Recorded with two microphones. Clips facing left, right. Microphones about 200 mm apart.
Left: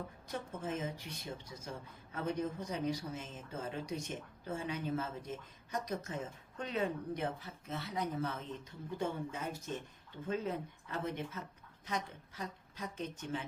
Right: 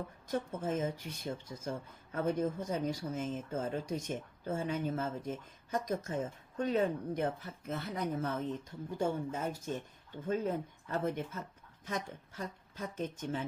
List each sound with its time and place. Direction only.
0.3 s speech: 45° right (ahead or behind)